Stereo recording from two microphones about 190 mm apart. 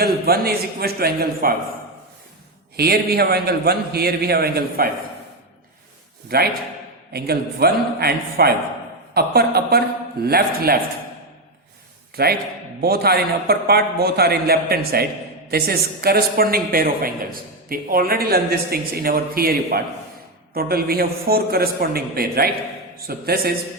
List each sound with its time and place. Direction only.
0.0 s a woman's voice: 55° right (ahead or behind)
2.7 s a man's voice: 55° right (ahead or behind)
7.1 s a man's voice: 55° right (ahead or behind)
12.1 s a man's voice: 55° right (ahead or behind)